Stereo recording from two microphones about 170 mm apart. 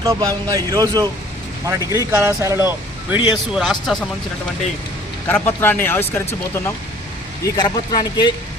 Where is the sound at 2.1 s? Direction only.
15° right (ahead or behind).